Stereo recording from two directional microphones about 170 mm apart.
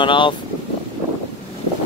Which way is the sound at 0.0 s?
30° left (ahead or behind).